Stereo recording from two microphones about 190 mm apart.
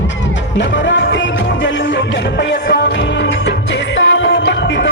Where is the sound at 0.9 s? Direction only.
70° left (ahead or behind).